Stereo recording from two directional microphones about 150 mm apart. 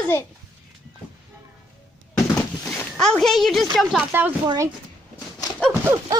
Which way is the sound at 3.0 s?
5° left (ahead or behind).